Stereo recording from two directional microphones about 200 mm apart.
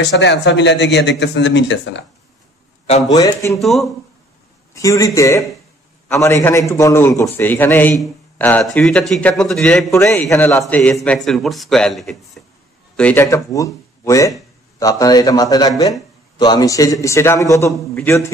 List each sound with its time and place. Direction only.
0.0 s a man's voice: 60° left (ahead or behind)
3.1 s a man's voice: 20° left (ahead or behind)
3.5 s a man's voice: centre (ahead or behind)
4.7 s a man's voice: 15° left (ahead or behind)